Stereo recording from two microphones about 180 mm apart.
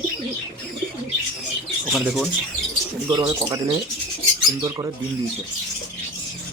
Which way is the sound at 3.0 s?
25° right (ahead or behind).